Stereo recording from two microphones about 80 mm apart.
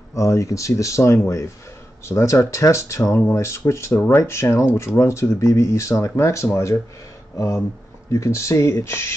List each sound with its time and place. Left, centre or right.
0.1 s speech: left
3.9 s speech: left
4.2 s speech: left